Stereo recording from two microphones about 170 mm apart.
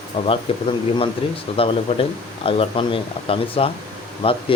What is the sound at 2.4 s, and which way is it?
Speech, 30° left (ahead or behind).